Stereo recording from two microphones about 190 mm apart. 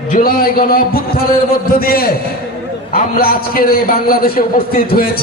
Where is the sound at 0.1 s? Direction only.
50° left (ahead or behind).